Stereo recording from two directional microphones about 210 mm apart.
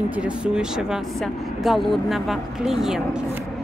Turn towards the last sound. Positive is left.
turn(degrees=-5)  # may be behind; listen again after turning